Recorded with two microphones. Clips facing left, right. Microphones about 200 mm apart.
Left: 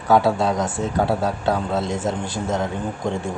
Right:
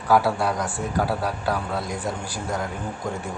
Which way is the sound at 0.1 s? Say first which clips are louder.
Left 3 dB; 20° left (ahead or behind).